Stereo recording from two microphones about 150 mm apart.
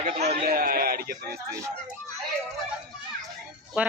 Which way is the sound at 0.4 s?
75° right (ahead or behind).